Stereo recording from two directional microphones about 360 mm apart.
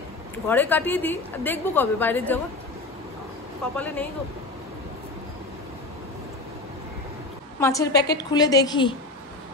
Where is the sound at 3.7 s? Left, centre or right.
Centre.